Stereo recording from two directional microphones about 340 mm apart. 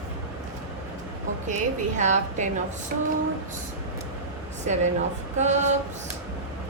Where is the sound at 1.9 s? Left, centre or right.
Right.